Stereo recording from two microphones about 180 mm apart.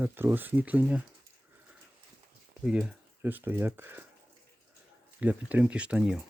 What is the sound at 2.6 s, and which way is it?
Speech, 5° right (ahead or behind).